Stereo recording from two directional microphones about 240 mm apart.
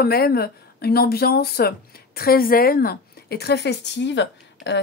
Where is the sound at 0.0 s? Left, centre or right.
Left.